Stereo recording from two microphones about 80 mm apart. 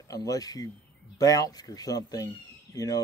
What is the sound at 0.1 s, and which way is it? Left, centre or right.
Speech, left.